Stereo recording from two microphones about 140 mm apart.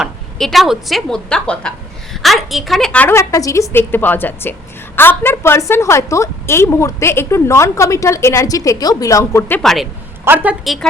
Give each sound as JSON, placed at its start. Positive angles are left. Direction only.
{"t": 0.0, "sound": "a woman's voice", "side_deg": 0}
{"t": 9.6, "sound": "speech", "side_deg": 0}
{"t": 10.2, "sound": "a woman's voice", "side_deg": -10}